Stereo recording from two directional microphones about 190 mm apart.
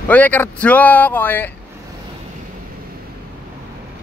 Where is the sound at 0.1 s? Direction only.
10° left (ahead or behind).